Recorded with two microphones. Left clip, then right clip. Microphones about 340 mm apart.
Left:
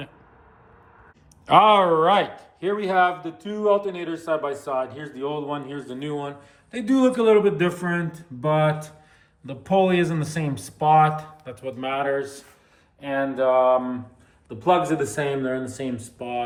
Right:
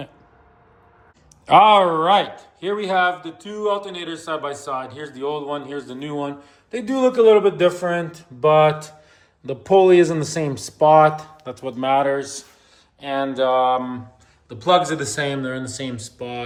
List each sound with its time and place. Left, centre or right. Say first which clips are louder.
1.5 s a man's voice: right 3 dB; centre